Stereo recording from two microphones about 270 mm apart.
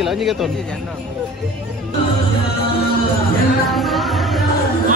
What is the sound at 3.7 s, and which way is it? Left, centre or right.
Music, centre.